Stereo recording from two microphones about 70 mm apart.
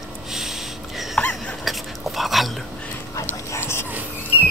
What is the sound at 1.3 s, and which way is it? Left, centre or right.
Dog, centre.